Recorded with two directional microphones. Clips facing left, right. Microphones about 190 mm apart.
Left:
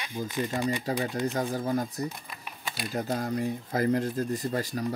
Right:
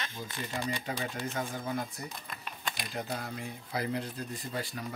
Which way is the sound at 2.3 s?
10° left (ahead or behind).